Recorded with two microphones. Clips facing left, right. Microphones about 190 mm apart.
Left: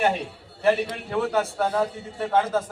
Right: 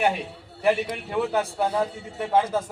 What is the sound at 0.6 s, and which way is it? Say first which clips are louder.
A man's voice: left 1 dB; 15° right (ahead or behind).